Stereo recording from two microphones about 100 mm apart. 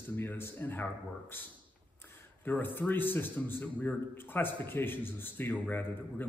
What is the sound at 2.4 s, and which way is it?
Speech, 20° left (ahead or behind).